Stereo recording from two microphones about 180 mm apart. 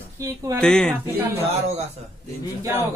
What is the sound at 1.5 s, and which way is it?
Speech, 35° right (ahead or behind).